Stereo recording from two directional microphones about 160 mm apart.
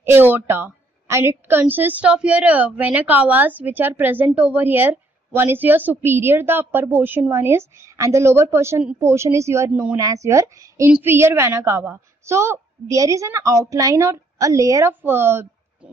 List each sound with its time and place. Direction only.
0.0 s a woman's voice: 15° right (ahead or behind)